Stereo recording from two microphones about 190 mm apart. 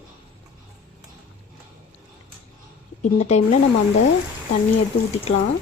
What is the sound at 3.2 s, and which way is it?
Speech, 35° left (ahead or behind).